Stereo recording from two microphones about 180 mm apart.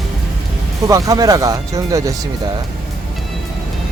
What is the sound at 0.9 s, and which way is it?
Speech, 20° right (ahead or behind).